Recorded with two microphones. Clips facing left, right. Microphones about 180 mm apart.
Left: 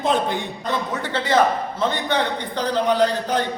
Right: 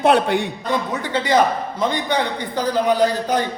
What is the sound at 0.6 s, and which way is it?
A man's voice, 10° right (ahead or behind).